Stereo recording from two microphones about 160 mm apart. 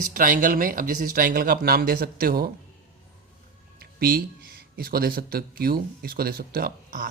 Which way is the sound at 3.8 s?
70° right (ahead or behind).